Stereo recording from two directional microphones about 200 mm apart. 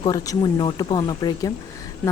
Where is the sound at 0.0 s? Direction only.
15° left (ahead or behind).